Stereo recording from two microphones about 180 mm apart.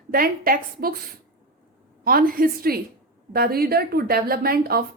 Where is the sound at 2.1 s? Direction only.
55° right (ahead or behind).